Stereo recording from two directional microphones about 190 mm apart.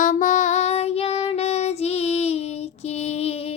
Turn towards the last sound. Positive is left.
turn(degrees=30)  # may be behind; listen again after turning